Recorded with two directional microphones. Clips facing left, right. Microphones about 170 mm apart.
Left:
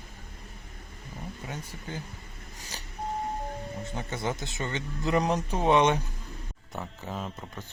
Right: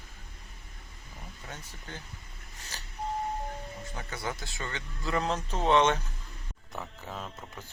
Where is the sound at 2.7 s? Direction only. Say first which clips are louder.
Left 2 dB; 15° left (ahead or behind).